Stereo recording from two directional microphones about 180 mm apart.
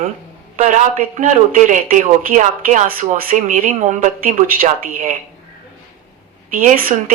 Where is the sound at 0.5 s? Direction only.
40° right (ahead or behind).